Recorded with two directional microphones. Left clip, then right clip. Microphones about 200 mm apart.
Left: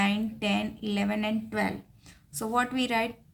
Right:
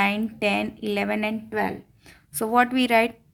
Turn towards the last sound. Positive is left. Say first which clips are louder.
# right 8 dB
turn(degrees=-40)  # may be behind; listen again after turning